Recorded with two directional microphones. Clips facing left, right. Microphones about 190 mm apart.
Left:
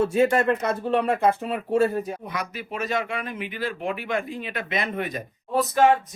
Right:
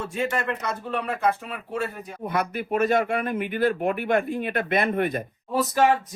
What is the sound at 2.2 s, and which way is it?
Speech, 55° right (ahead or behind).